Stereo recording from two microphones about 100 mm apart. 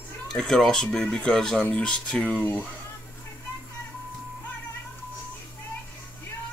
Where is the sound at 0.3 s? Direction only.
5° left (ahead or behind).